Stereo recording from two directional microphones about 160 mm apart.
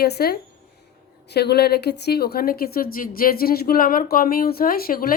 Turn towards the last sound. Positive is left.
turn(degrees=65)  # may be behind; listen again after turning